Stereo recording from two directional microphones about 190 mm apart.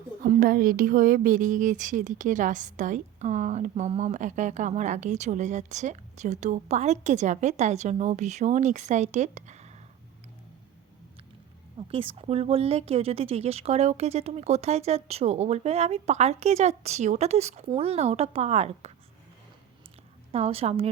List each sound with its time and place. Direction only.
0.3 s a woman's voice: 50° right (ahead or behind)
11.8 s a woman's voice: 30° right (ahead or behind)
20.3 s a woman's voice: 30° right (ahead or behind)